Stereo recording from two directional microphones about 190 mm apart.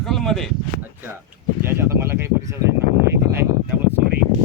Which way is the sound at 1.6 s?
10° right (ahead or behind).